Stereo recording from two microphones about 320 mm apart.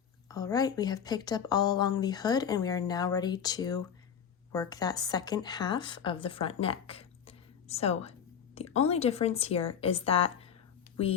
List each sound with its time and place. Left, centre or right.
0.3 s a woman's voice: centre